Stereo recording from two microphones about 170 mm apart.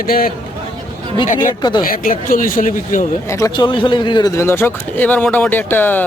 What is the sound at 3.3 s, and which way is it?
Speech, 20° left (ahead or behind).